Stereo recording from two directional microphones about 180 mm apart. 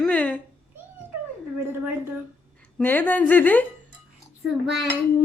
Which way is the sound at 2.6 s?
10° left (ahead or behind).